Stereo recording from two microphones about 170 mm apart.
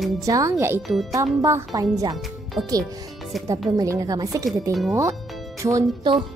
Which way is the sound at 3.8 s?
20° right (ahead or behind).